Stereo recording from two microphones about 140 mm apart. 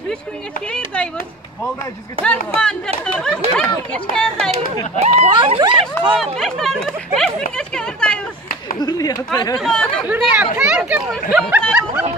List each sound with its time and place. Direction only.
0.7 s a man's voice: 10° left (ahead or behind)
2.2 s a man's voice: 5° left (ahead or behind)
4.9 s speech: 50° right (ahead or behind)
5.3 s speech: 35° right (ahead or behind)
6.1 s speech: centre (ahead or behind)
8.7 s speech: 25° left (ahead or behind)
9.6 s speech: 5° left (ahead or behind)
10.0 s speech: 10° right (ahead or behind)